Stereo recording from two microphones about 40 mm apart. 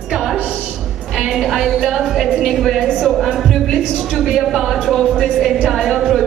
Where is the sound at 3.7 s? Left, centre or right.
Centre.